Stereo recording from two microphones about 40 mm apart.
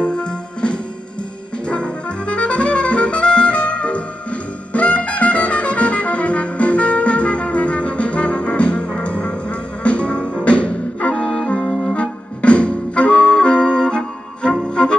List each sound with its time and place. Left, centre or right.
0.0 s music: left
11.9 s flute: left
14.7 s music: left